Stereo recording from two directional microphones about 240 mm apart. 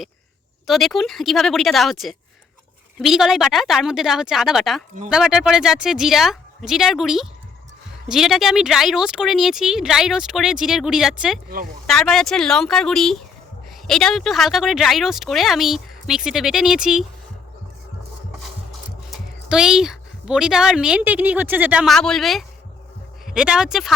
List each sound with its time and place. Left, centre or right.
0.7 s speech: centre
11.4 s speech: right
11.9 s speech: centre
19.1 s speech: centre